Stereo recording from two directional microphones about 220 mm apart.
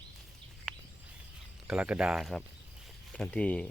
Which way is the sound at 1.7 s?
5° right (ahead or behind).